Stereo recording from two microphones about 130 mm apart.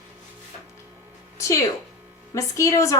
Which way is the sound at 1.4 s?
25° left (ahead or behind).